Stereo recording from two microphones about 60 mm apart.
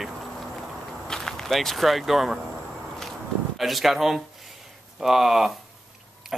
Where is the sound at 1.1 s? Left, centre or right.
Centre.